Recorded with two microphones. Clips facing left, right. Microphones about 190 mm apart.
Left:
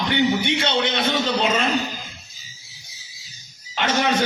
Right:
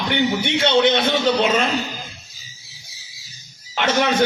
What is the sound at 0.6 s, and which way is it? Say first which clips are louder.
A man's voice: right 6 dB; 50° right (ahead or behind).